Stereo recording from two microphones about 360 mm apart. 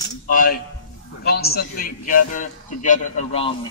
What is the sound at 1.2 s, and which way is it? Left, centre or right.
A man's voice, left.